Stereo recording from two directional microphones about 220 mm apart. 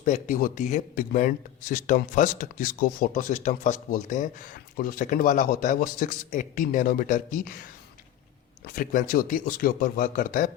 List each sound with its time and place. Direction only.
0.0 s speech: 35° left (ahead or behind)
8.6 s speech: 40° left (ahead or behind)